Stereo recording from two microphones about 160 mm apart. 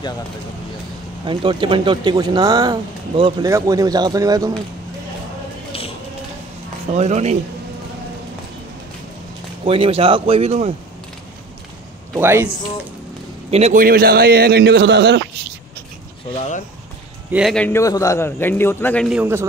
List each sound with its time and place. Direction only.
1.2 s speech: 30° right (ahead or behind)
6.9 s speech: 45° right (ahead or behind)
9.7 s speech: 35° right (ahead or behind)
12.2 s a man's voice: 15° right (ahead or behind)
13.5 s a man's voice: 45° right (ahead or behind)
13.7 s a man's voice: 65° right (ahead or behind); by 15.2 s 90° right
16.3 s speech: 50° left (ahead or behind)
17.3 s speech: 5° right (ahead or behind)
17.6 s a man's voice: 15° left (ahead or behind)
19.0 s a man's voice: 10° right (ahead or behind)